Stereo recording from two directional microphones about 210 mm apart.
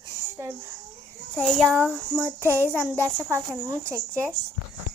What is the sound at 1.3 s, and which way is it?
Speech, 5° left (ahead or behind).